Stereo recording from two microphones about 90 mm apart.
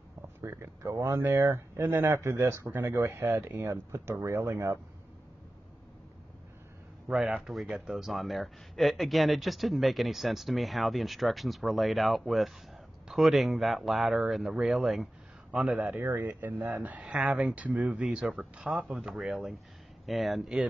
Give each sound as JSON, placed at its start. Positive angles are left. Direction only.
{"t": 0.4, "sound": "speech", "side_deg": -30}
{"t": 7.2, "sound": "speech", "side_deg": -5}
{"t": 14.4, "sound": "speech", "side_deg": -10}
{"t": 15.6, "sound": "speech", "side_deg": -15}